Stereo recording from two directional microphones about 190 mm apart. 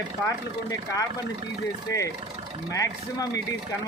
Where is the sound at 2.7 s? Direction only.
20° left (ahead or behind).